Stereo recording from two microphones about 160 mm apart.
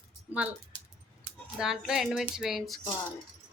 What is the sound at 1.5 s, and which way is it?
Speech, 5° right (ahead or behind).